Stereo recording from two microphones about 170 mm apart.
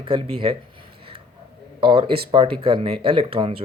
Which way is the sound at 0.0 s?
30° right (ahead or behind).